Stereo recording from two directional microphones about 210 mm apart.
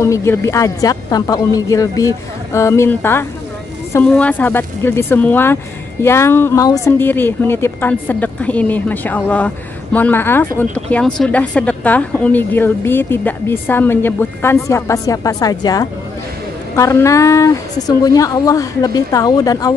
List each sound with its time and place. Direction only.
0.0 s speech: 15° left (ahead or behind)